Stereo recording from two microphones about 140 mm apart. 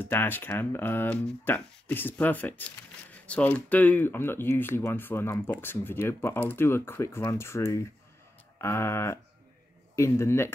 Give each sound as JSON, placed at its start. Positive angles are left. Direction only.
{"t": 0.0, "sound": "speech", "side_deg": 15}
{"t": 8.5, "sound": "a sound", "side_deg": 20}
{"t": 9.9, "sound": "speech", "side_deg": 20}